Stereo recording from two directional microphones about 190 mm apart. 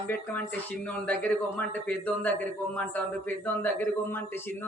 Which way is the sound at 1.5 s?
5° left (ahead or behind).